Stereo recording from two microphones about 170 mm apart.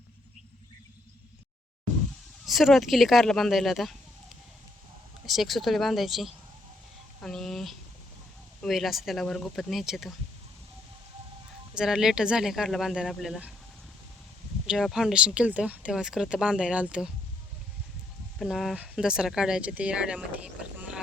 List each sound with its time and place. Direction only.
2.5 s speech: centre (ahead or behind)
5.2 s speech: centre (ahead or behind)
11.8 s speech: 5° right (ahead or behind)
14.7 s speech: centre (ahead or behind)
18.3 s speech: centre (ahead or behind)